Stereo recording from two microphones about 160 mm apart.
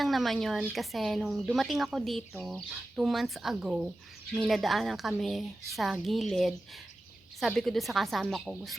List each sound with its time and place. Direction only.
0.0 s a woman's voice: centre (ahead or behind)